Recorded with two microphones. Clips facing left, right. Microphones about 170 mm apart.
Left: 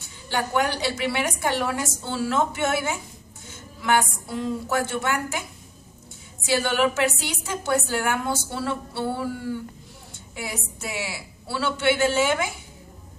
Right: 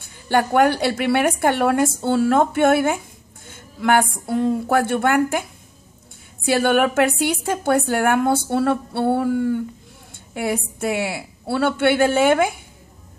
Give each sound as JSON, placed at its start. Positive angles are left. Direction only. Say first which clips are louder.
{"t": 0.0, "sound": "a woman's voice", "louder": "right 8 dB", "side_deg": -55}
{"t": 6.4, "sound": "a woman's voice", "louder": "right 5 dB", "side_deg": -55}